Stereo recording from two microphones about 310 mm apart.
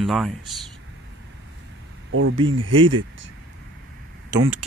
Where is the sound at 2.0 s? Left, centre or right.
Right.